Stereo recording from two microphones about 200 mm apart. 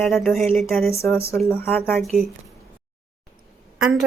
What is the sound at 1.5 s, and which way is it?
Speech, 10° left (ahead or behind).